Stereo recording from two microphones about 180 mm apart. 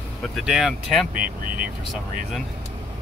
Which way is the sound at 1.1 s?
50° right (ahead or behind).